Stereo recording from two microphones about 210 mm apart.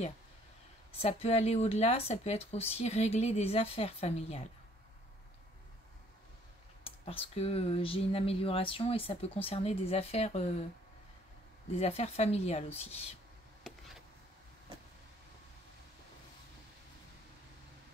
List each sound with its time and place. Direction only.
1.0 s speech: 30° left (ahead or behind)
6.8 s speech: 25° left (ahead or behind)
11.8 s a woman's voice: 30° left (ahead or behind)